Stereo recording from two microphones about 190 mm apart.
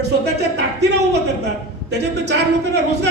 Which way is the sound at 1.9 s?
65° right (ahead or behind).